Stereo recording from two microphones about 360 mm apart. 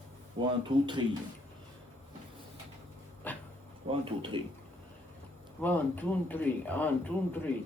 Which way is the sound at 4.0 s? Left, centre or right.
Centre.